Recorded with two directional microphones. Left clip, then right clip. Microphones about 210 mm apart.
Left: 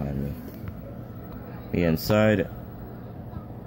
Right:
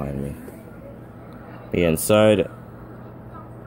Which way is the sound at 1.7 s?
25° right (ahead or behind).